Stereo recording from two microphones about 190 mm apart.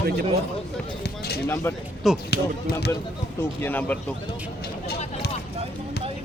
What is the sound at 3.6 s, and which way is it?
Speech, 10° left (ahead or behind).